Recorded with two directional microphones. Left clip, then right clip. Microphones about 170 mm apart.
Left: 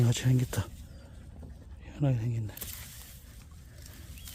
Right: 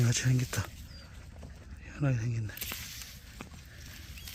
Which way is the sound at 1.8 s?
20° left (ahead or behind).